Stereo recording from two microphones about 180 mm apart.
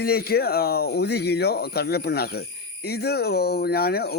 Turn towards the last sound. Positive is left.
turn(degrees=60)  # may be behind; listen again after turning